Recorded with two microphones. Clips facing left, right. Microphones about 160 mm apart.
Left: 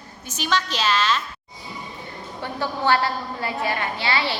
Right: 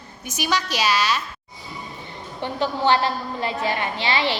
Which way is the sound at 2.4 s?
20° right (ahead or behind).